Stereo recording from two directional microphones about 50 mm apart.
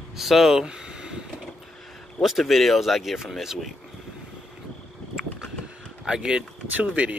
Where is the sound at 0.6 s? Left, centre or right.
Centre.